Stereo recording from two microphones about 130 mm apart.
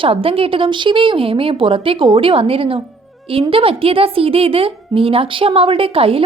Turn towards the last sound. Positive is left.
turn(degrees=-45)  # may be behind; listen again after turning